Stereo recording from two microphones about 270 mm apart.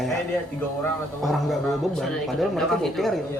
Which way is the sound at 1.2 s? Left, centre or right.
Centre.